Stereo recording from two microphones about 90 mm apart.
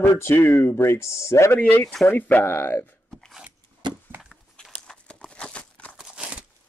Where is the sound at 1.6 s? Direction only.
20° left (ahead or behind).